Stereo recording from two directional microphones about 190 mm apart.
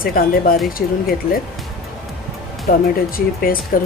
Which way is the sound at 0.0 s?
50° left (ahead or behind).